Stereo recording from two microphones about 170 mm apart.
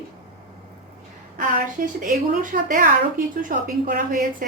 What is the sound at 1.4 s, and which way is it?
A woman's voice, 50° right (ahead or behind).